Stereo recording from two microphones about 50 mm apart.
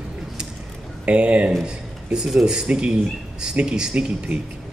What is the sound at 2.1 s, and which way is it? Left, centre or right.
Speech, centre.